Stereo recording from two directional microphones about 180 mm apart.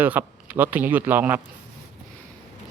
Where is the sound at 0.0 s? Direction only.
10° right (ahead or behind).